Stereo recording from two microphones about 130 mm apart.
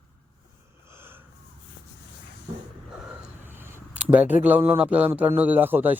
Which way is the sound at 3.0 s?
15° right (ahead or behind).